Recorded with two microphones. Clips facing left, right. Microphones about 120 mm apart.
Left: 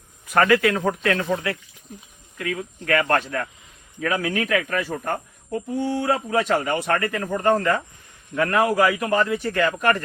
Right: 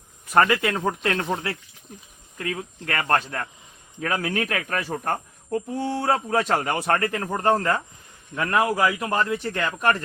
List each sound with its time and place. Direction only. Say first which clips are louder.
0.3 s a man's voice: left 2 dB; 25° right (ahead or behind)